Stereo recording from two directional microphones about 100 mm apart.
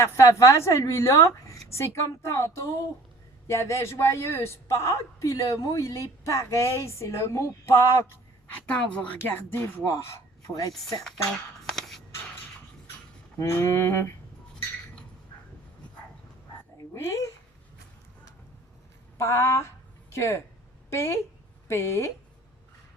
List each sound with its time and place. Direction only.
0.0 s a woman's voice: 30° left (ahead or behind)
8.7 s speech: 15° left (ahead or behind)
9.2 s a woman's voice: 25° left (ahead or behind)
9.8 s speech: 35° left (ahead or behind)
11.6 s a sound: 5° left (ahead or behind)
13.4 s a woman's voice: 25° left (ahead or behind)
16.9 s speech: 30° left (ahead or behind)
19.1 s a woman's voice: 30° left (ahead or behind)